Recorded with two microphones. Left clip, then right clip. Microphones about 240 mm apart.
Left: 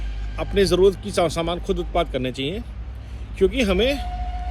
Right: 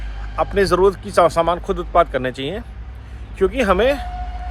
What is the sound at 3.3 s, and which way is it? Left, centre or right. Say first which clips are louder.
Speech: right 3 dB; centre.